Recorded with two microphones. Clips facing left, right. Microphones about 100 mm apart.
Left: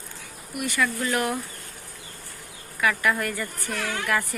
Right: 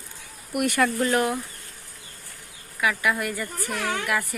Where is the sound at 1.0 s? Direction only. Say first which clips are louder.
Right 3 dB; 30° right (ahead or behind).